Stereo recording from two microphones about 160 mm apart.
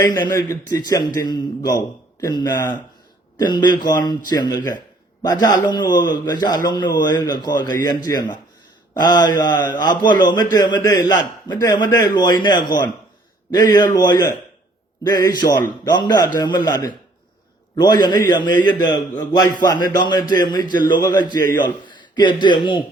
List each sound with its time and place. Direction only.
0.0 s a man's voice: 20° left (ahead or behind)